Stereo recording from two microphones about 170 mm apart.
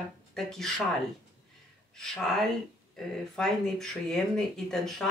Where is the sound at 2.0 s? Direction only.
5° left (ahead or behind).